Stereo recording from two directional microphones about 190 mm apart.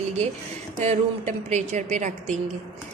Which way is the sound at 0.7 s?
40° right (ahead or behind).